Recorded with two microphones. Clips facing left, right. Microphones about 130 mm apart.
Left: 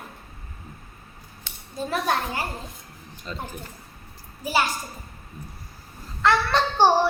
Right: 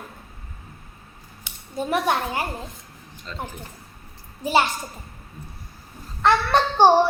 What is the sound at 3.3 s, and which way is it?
Speech, 15° left (ahead or behind).